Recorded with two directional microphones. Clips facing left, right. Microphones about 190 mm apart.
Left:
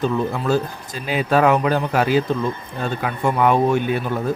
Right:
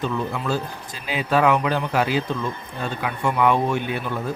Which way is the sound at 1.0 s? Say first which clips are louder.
Left 3 dB; 45° left (ahead or behind).